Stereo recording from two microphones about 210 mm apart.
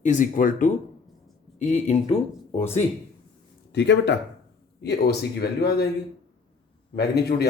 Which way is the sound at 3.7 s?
55° left (ahead or behind).